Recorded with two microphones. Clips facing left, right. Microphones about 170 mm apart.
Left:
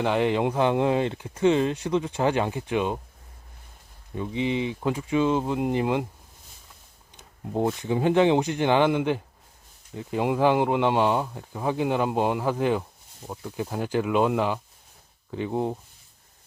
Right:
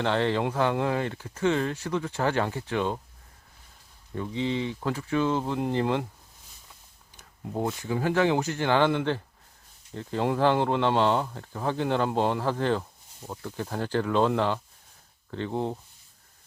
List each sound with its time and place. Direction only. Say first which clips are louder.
0.0 s speech: left 2 dB; 15° left (ahead or behind)
4.1 s speech: left 2 dB; 15° left (ahead or behind)
7.2 s speech: left 4 dB; 20° left (ahead or behind)